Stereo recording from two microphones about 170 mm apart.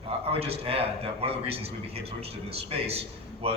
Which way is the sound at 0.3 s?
35° right (ahead or behind).